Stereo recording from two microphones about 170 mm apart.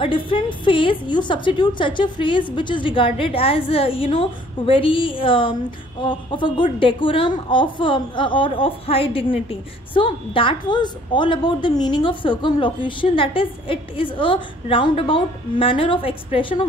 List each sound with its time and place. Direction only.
0.0 s a woman's voice: 30° left (ahead or behind)